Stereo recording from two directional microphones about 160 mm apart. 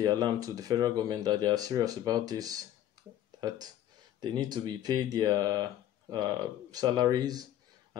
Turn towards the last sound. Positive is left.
turn(degrees=-25)  # may be behind; listen again after turning